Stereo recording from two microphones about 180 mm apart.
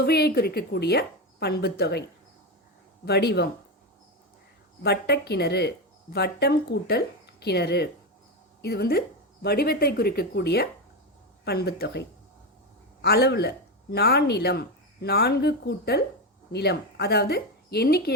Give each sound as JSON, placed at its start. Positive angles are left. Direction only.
{"t": 0.0, "sound": "speech", "side_deg": 60}
{"t": 4.8, "sound": "speech", "side_deg": 65}